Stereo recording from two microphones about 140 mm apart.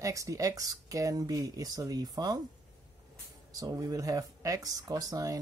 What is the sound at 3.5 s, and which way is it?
Speech, 25° right (ahead or behind).